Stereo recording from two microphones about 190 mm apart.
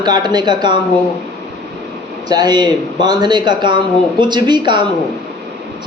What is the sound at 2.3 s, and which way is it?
A man's voice, 20° right (ahead or behind).